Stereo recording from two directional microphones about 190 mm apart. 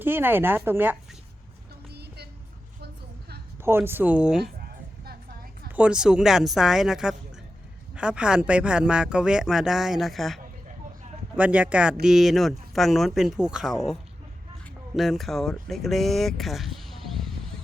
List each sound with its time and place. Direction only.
0.0 s speech: 10° right (ahead or behind)
1.9 s music: 60° right (ahead or behind)
2.8 s a sound: 60° right (ahead or behind)
3.6 s speech: 10° right (ahead or behind)
5.6 s speech: 5° right (ahead or behind)